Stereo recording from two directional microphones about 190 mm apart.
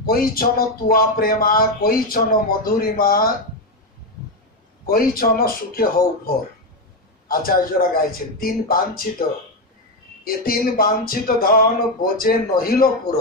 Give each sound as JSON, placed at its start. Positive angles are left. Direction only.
{"t": 0.0, "sound": "speech", "side_deg": 50}
{"t": 4.8, "sound": "speech", "side_deg": 50}
{"t": 10.2, "sound": "speech", "side_deg": 50}